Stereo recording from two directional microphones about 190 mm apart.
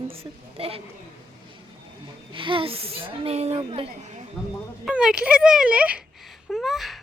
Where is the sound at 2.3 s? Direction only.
25° right (ahead or behind).